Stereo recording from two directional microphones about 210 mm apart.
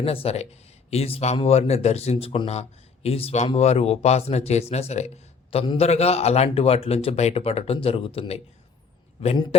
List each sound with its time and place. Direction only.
0.0 s speech: 25° left (ahead or behind)